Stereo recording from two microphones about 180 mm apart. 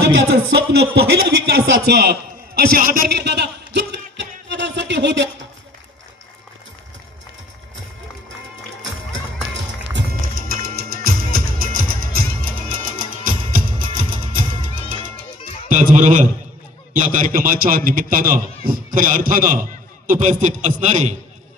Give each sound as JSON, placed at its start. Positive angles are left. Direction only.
{"t": 0.0, "sound": "music", "side_deg": -90}
{"t": 1.3, "sound": "speech", "side_deg": -65}
{"t": 1.9, "sound": "a sound", "side_deg": -65}
{"t": 10.2, "sound": "music", "side_deg": -55}
{"t": 15.7, "sound": "a man's voice", "side_deg": -45}